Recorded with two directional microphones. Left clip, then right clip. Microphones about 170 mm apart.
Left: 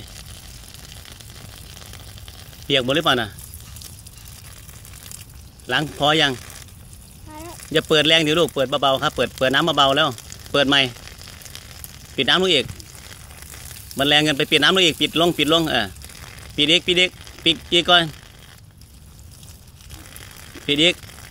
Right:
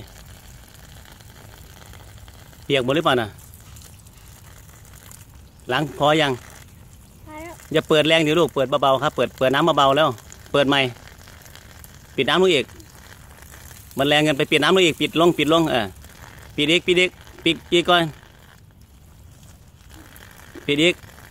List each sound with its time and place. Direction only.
2.6 s a man's voice: 30° right (ahead or behind)
5.9 s a man's voice: 30° right (ahead or behind)
7.7 s a man's voice: 30° right (ahead or behind)
10.1 s frying: 35° left (ahead or behind)
10.5 s a man's voice: 35° right (ahead or behind)
11.0 s frying: 35° left (ahead or behind)
12.2 s a man's voice: 35° right (ahead or behind)
12.6 s a sound: 35° left (ahead or behind)
13.9 s a man's voice: 30° right (ahead or behind)
16.1 s a sound: 35° left (ahead or behind)
16.5 s a man's voice: 35° right (ahead or behind)
20.2 s a sound: 35° left (ahead or behind)
20.6 s speech: 35° right (ahead or behind)